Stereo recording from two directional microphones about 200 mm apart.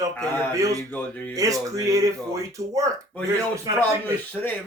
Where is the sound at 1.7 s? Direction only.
15° right (ahead or behind).